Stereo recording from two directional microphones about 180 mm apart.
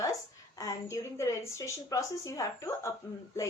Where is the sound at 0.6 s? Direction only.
15° left (ahead or behind).